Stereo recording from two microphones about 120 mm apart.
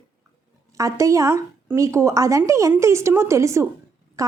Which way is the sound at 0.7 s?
25° right (ahead or behind).